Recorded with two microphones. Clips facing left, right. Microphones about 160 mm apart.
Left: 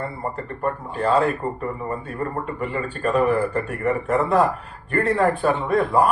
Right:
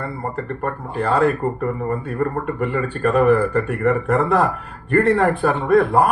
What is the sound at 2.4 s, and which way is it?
A man's voice, 60° right (ahead or behind).